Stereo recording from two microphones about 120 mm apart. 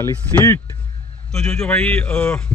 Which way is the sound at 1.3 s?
5° left (ahead or behind).